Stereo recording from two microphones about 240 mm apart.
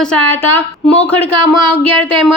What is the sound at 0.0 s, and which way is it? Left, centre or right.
Speech, centre.